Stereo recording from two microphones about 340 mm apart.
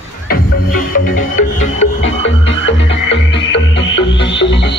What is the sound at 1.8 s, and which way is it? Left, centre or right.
Music, left.